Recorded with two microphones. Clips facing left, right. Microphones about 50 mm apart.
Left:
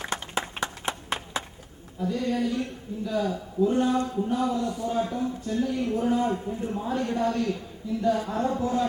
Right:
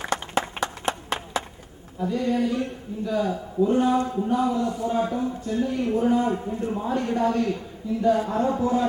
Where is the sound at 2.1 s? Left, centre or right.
Centre.